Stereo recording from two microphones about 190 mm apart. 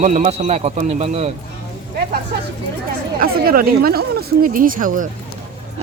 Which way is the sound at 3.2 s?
50° right (ahead or behind).